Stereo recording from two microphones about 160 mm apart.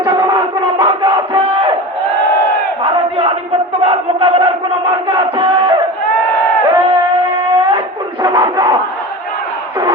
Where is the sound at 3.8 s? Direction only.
35° right (ahead or behind).